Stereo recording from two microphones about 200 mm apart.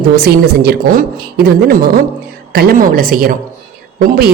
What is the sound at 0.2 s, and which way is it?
Speech, 50° right (ahead or behind).